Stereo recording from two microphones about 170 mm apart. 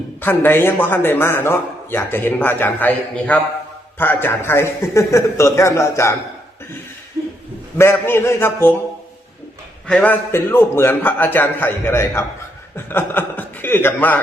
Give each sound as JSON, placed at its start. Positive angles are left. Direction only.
{"t": 0.2, "sound": "a man's voice", "side_deg": 10}
{"t": 7.8, "sound": "a man's voice", "side_deg": 15}
{"t": 9.8, "sound": "a man's voice", "side_deg": 5}